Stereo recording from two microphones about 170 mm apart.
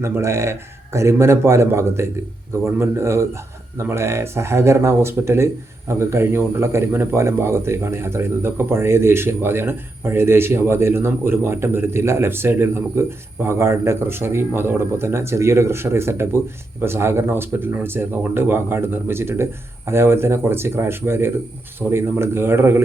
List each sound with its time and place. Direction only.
0.0 s speech: 15° right (ahead or behind)